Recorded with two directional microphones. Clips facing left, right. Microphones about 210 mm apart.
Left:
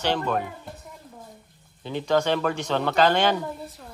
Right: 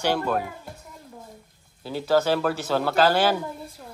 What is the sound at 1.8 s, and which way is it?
Speech, 5° right (ahead or behind).